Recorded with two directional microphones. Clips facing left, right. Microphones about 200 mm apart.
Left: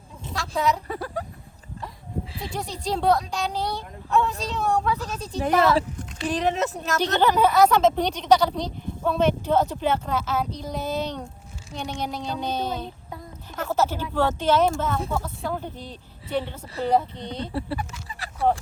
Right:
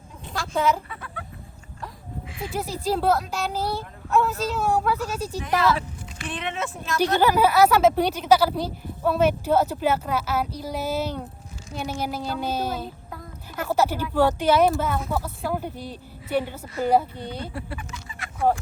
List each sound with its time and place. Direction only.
0.3 s a sound: centre (ahead or behind)
0.9 s speech: 35° left (ahead or behind)
2.5 s speech: 5° right (ahead or behind)
5.4 s speech: 40° left (ahead or behind)
7.0 s speech: 10° right (ahead or behind)
17.5 s speech: 30° left (ahead or behind)
18.1 s fowl: 35° left (ahead or behind)